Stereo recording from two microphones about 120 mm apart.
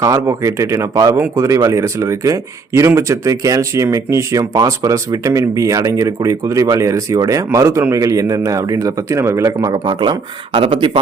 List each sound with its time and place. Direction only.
0.0 s speech: 25° right (ahead or behind); by 11.0 s 45° right (ahead or behind)